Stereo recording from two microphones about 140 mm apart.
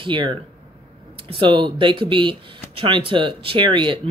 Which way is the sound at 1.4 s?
35° right (ahead or behind).